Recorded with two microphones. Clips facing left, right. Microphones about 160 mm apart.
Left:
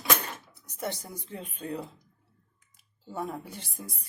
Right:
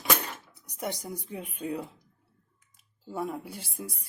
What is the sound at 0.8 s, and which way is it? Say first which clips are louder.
Speech: right 1 dB; 10° right (ahead or behind).